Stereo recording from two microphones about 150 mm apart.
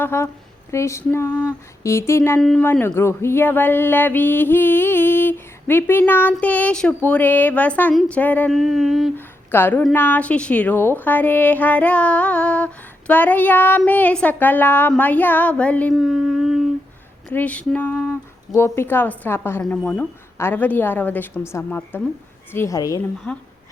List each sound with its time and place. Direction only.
0.0 s a woman's voice: 15° left (ahead or behind)
2.4 s a sound: 5° left (ahead or behind)
2.6 s a woman's voice: 15° left (ahead or behind)
8.5 s a sound: centre (ahead or behind)
9.1 s a woman's voice: 15° left (ahead or behind)
16.0 s speech: centre (ahead or behind)
17.2 s a woman's voice: 10° left (ahead or behind)
23.3 s a woman's voice: 10° left (ahead or behind)